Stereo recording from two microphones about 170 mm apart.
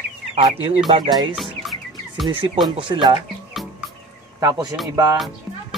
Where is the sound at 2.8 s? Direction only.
30° right (ahead or behind).